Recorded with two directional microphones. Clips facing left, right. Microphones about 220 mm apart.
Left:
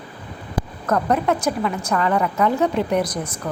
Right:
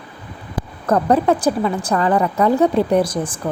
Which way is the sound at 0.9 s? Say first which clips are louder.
Right 5 dB; 30° right (ahead or behind).